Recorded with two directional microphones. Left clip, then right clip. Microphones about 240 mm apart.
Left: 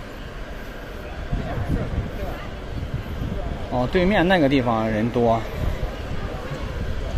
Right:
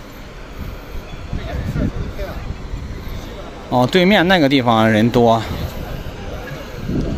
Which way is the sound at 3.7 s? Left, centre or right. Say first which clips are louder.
Right 7 dB; right.